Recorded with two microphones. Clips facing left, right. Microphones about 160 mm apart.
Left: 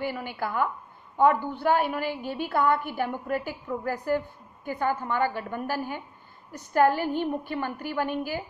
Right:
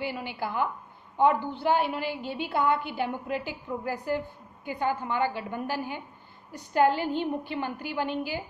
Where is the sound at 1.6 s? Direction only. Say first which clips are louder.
Left 1 dB; 50° left (ahead or behind).